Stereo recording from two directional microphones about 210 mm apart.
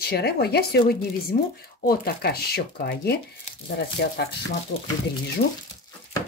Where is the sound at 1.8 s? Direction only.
50° left (ahead or behind).